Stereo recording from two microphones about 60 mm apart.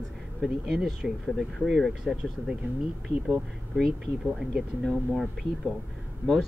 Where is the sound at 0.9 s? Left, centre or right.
Centre.